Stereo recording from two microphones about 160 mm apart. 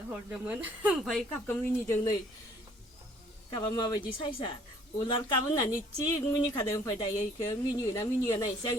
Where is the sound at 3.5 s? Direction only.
30° left (ahead or behind).